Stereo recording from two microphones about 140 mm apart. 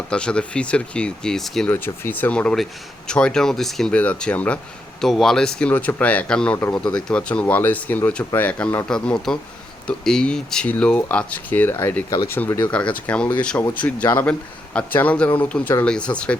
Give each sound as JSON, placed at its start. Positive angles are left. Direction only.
{"t": 0.1, "sound": "speech", "side_deg": 5}
{"t": 1.7, "sound": "speech", "side_deg": 15}